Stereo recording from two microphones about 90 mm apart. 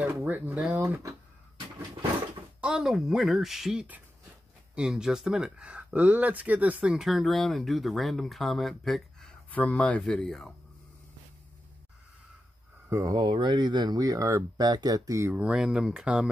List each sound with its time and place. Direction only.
0.2 s speech: 15° right (ahead or behind)
2.6 s speech: 5° right (ahead or behind)
7.1 s speech: centre (ahead or behind)
9.5 s speech: 15° left (ahead or behind)
12.9 s speech: 40° right (ahead or behind)
13.3 s speech: 55° right (ahead or behind); by 14.4 s 40° right (ahead or behind)
14.6 s speech: 50° right (ahead or behind)
15.3 s speech: 10° right (ahead or behind)